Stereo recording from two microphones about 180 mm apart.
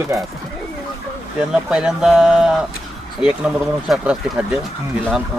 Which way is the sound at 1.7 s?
5° right (ahead or behind).